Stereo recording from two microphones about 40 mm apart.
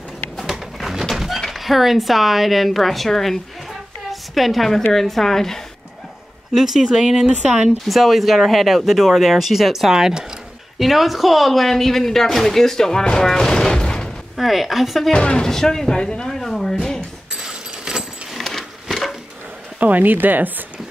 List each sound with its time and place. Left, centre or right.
0.5 s pigeon: centre
1.1 s a sound: centre
1.5 s a woman's voice: centre
6.5 s speech: centre
10.8 s speech: centre
13.0 s fusillade: centre
14.3 s speech: centre
15.3 s speech: centre
16.0 s speech: left
16.3 s speech: centre
17.3 s vehicle: centre
18.3 s a sound: centre
19.8 s speech: right